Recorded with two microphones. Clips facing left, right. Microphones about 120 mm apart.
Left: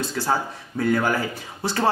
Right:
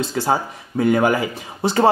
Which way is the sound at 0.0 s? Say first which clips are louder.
Right 4 dB; 20° right (ahead or behind).